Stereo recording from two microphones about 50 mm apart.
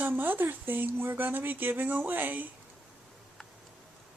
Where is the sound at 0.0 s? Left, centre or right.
Right.